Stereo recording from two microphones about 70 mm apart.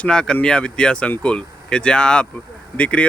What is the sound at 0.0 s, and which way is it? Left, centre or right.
Speech, centre.